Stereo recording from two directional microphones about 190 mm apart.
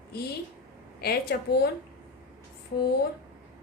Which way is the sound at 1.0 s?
55° left (ahead or behind).